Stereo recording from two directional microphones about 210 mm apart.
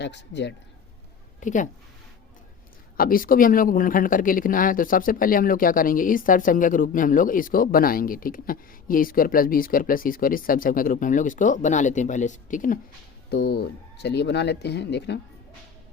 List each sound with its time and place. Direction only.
0.0 s speech: 55° left (ahead or behind)
1.4 s speech: 35° left (ahead or behind)
3.0 s speech: 45° left (ahead or behind)
13.3 s speech: 55° left (ahead or behind)